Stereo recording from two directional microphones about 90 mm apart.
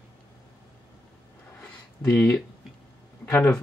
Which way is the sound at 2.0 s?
30° left (ahead or behind).